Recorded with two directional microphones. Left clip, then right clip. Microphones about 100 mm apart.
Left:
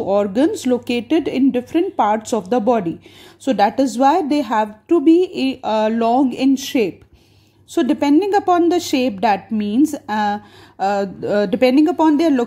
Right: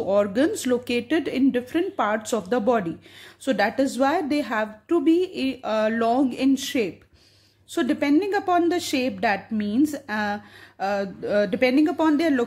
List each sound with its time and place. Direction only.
0.0 s a woman's voice: 25° left (ahead or behind)